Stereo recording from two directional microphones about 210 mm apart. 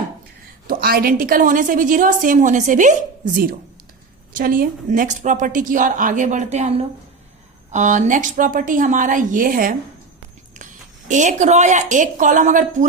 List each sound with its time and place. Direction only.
0.7 s a woman's voice: 45° right (ahead or behind)
4.4 s a woman's voice: 45° right (ahead or behind)
11.1 s a woman's voice: 35° right (ahead or behind)